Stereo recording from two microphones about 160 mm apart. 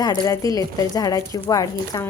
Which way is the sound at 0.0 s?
25° left (ahead or behind).